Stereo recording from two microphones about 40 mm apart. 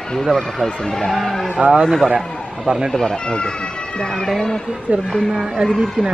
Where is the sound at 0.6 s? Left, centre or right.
Centre.